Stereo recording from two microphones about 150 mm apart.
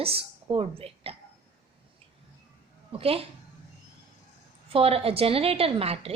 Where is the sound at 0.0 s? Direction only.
40° right (ahead or behind).